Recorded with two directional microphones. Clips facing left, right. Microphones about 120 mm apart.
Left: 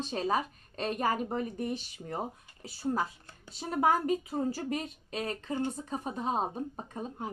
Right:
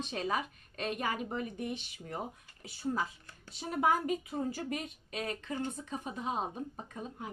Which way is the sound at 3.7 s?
35° left (ahead or behind).